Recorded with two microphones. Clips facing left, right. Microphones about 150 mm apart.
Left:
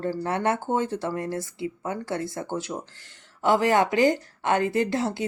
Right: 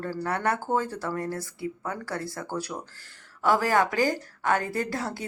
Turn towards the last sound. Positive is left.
turn(degrees=20)  # may be behind; listen again after turning